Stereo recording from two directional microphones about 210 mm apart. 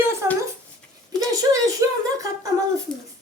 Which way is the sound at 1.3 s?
15° right (ahead or behind).